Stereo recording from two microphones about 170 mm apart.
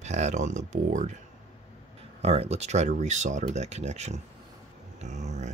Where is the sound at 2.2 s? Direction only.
40° right (ahead or behind).